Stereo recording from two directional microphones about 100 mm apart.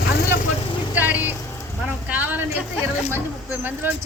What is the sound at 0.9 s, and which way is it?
A woman's voice, 15° right (ahead or behind).